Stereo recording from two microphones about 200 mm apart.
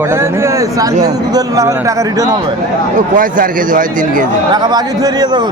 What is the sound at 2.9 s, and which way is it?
Speech, 40° right (ahead or behind).